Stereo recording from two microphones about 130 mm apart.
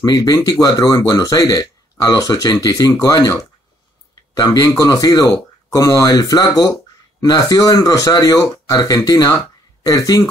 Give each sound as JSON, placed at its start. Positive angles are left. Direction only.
{"t": 0.0, "sound": "speech", "side_deg": 30}